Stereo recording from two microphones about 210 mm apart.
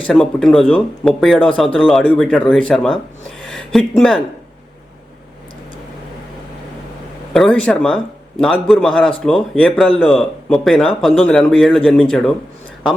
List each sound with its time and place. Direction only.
0.1 s speech: centre (ahead or behind)
7.3 s speech: 5° left (ahead or behind)